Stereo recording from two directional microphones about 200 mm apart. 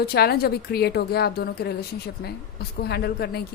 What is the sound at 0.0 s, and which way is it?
A woman's voice, 50° left (ahead or behind).